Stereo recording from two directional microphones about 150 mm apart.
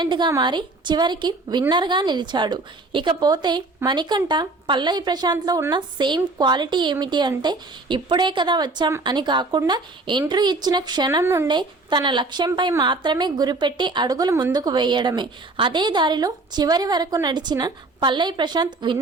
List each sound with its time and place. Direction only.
0.0 s a woman's voice: 30° right (ahead or behind)
11.4 s a woman's voice: 30° right (ahead or behind)